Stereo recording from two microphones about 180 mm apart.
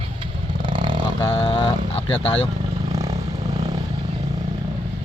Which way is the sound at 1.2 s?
30° left (ahead or behind).